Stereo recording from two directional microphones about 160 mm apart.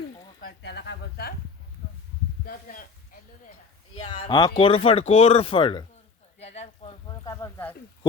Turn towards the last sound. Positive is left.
turn(degrees=20)  # may be behind; listen again after turning